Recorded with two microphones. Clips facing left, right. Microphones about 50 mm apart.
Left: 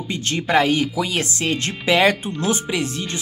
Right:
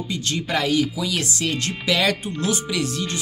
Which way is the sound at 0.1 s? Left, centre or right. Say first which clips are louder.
Left 6 dB; left.